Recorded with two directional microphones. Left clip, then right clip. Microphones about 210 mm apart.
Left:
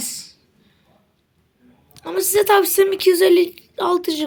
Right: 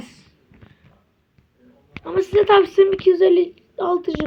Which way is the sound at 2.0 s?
15° left (ahead or behind).